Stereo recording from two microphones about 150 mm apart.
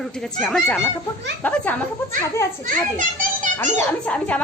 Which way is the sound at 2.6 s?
60° right (ahead or behind).